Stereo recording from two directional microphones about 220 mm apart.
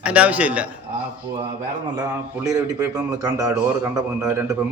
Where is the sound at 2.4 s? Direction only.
15° right (ahead or behind).